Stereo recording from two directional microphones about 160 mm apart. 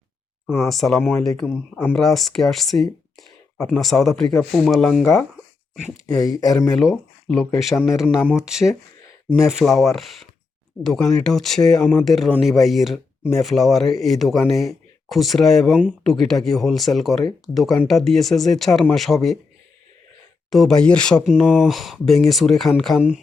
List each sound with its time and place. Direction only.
0.7 s speech: centre (ahead or behind)
6.1 s speech: 20° left (ahead or behind)
6.7 s speech: centre (ahead or behind)
20.5 s speech: centre (ahead or behind)